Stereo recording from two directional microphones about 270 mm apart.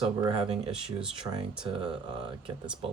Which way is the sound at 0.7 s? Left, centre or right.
Centre.